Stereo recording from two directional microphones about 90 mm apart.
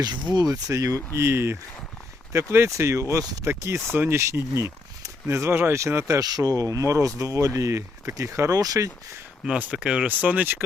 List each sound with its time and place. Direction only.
0.0 s speech: 50° right (ahead or behind)
0.7 s speech: 35° right (ahead or behind)
6.2 s speech: 45° right (ahead or behind)
9.6 s speech: 10° right (ahead or behind)